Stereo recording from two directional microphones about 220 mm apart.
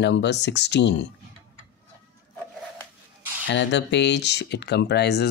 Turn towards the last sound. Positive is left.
turn(degrees=50)  # may be behind; listen again after turning